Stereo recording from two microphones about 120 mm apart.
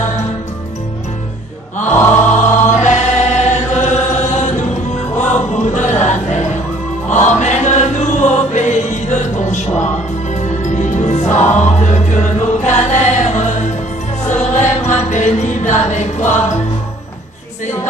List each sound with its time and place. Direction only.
1.9 s music: 20° left (ahead or behind)
2.3 s choir: 85° left
5.6 s a sound: 75° left (ahead or behind)
7.1 s chant: 80° left
10.4 s music: 90° left
14.4 s music: 80° left